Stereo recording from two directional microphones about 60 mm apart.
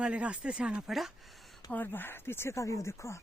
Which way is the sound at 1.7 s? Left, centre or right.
Left.